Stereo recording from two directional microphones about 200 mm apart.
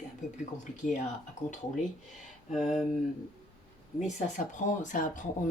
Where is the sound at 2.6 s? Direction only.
Centre (ahead or behind).